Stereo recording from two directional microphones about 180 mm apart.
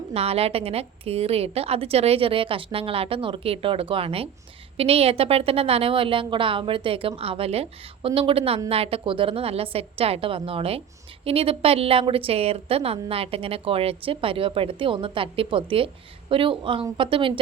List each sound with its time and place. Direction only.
0.1 s a woman's voice: 35° right (ahead or behind)